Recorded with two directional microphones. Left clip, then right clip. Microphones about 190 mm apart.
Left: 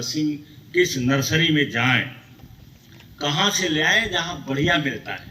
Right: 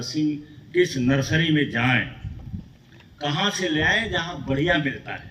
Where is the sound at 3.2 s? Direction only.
20° right (ahead or behind).